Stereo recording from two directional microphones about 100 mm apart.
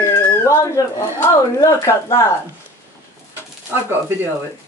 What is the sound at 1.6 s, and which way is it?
Speech, 35° left (ahead or behind).